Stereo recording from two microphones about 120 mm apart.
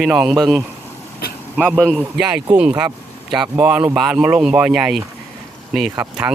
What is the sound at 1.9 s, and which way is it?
A man's voice, 5° right (ahead or behind).